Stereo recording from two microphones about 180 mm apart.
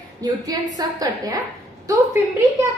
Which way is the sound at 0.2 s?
20° right (ahead or behind).